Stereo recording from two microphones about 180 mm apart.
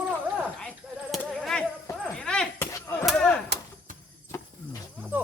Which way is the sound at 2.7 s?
15° left (ahead or behind).